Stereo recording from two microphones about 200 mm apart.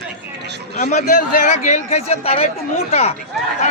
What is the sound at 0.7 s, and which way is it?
A man's voice, 40° left (ahead or behind).